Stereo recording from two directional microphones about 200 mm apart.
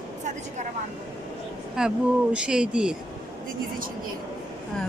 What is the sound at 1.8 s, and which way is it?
Speech, 5° right (ahead or behind).